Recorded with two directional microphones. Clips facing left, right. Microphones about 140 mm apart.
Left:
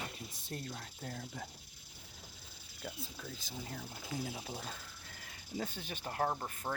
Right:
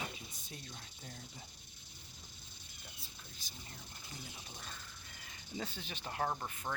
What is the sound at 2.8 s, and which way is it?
Speech, 90° left.